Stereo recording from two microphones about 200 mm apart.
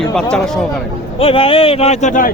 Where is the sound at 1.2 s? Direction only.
25° left (ahead or behind).